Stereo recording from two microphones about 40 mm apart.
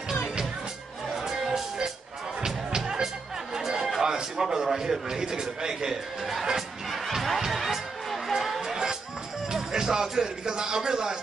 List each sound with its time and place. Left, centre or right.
1.1 s music: centre
3.5 s chatter: centre
4.0 s a sound: centre
5.2 s a man's voice: centre
7.1 s music: centre